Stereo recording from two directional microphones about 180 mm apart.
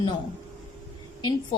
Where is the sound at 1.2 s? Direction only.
25° left (ahead or behind).